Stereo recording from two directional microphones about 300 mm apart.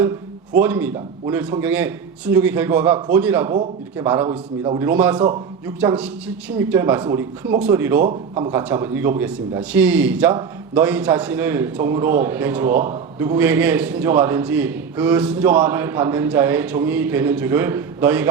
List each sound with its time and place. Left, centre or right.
0.6 s a man's voice: centre